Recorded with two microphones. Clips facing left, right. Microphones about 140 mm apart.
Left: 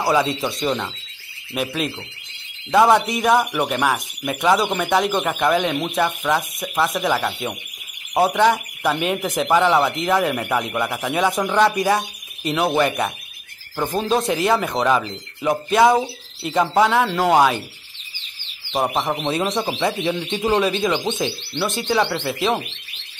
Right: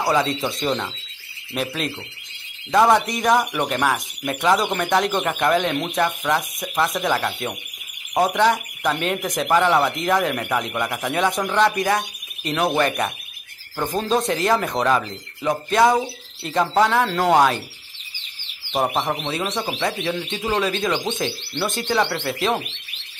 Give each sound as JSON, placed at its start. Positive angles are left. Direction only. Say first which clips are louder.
{"t": 0.0, "sound": "speech", "louder": "left 1 dB", "side_deg": 5}
{"t": 18.7, "sound": "speech", "louder": "left 1 dB", "side_deg": 0}
{"t": 19.2, "sound": "speech", "louder": "left 4 dB", "side_deg": 15}
{"t": 21.0, "sound": "speech", "louder": "left 2 dB", "side_deg": 20}
{"t": 21.5, "sound": "speech", "louder": "left 1 dB", "side_deg": 0}